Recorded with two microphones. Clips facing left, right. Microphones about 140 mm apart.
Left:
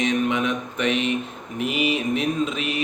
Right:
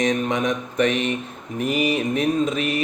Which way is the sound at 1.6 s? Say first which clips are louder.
Right 2 dB; 40° right (ahead or behind).